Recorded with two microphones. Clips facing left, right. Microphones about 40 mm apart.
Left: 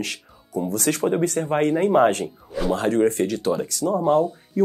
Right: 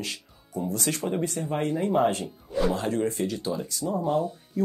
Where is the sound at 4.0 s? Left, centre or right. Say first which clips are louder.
Left 7 dB; left.